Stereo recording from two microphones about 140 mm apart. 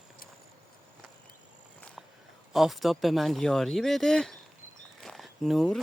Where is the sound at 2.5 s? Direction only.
Centre (ahead or behind).